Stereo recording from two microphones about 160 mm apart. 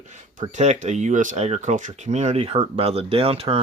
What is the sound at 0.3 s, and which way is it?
Speech, 45° right (ahead or behind).